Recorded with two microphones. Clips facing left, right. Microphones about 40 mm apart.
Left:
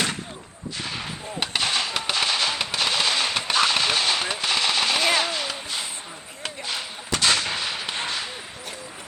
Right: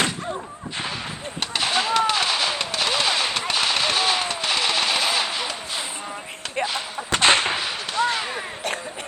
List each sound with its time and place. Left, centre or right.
1.4 s fireworks: centre
4.3 s machine gun: centre
7.1 s artillery fire: right
7.5 s artillery fire: centre
8.0 s whip: left